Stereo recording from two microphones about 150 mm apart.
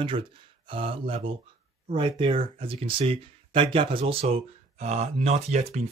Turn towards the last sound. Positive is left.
turn(degrees=-50)  # may be behind; listen again after turning